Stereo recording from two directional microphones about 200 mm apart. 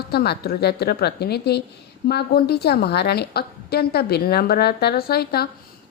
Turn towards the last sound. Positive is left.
turn(degrees=50)  # may be behind; listen again after turning